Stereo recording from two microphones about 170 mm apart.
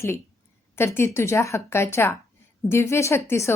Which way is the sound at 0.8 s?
15° left (ahead or behind).